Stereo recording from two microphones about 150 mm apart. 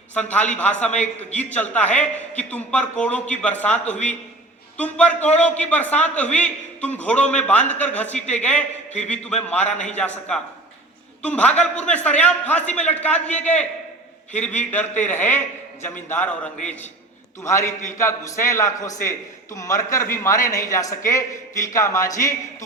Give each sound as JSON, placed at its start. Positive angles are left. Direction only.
{"t": 0.1, "sound": "a man's voice", "side_deg": 10}